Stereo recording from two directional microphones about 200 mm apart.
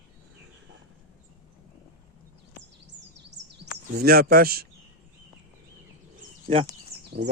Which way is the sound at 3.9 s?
50° right (ahead or behind).